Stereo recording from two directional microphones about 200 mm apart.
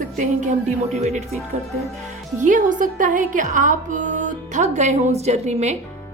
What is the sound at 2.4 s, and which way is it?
Speech, 40° right (ahead or behind).